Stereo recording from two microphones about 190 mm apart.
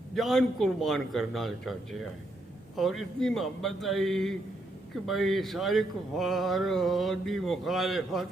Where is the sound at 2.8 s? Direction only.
Centre (ahead or behind).